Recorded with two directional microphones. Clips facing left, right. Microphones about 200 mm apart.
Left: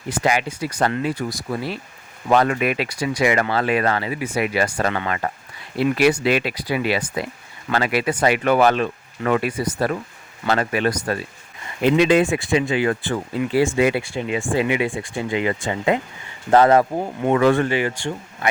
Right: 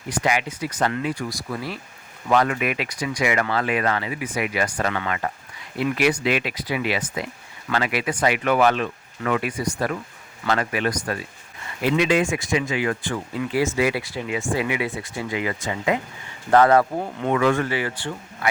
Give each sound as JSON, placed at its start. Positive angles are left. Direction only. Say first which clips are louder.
{"t": 0.2, "sound": "speech", "louder": "left 2 dB", "side_deg": 30}
{"t": 12.0, "sound": "speech", "louder": "left 4 dB", "side_deg": 35}
{"t": 17.3, "sound": "speech", "louder": "left 4 dB", "side_deg": 35}
{"t": 17.7, "sound": "speech", "louder": "left 4 dB", "side_deg": 20}